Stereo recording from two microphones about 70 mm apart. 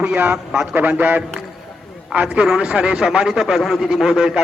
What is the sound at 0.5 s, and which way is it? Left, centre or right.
Speech, centre.